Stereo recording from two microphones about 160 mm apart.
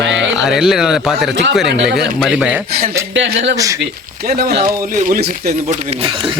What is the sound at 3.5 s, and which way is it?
Speech, 20° right (ahead or behind).